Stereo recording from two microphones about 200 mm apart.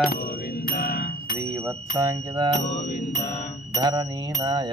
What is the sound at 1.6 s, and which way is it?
Music, 15° right (ahead or behind).